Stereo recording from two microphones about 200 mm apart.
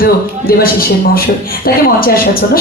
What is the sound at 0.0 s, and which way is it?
A woman's voice, 45° left (ahead or behind).